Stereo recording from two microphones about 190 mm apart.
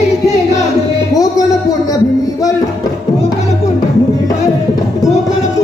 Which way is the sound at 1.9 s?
20° left (ahead or behind).